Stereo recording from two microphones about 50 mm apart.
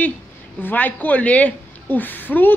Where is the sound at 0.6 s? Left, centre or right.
Left.